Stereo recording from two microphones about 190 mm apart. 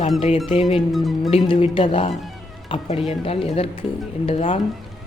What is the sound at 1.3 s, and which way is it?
Speech, 30° left (ahead or behind).